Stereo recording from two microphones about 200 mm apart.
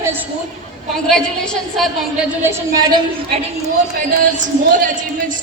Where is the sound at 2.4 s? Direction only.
15° right (ahead or behind).